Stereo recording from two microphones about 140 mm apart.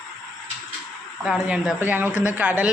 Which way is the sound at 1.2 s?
5° right (ahead or behind).